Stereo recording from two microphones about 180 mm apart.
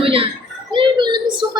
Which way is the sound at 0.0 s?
30° right (ahead or behind).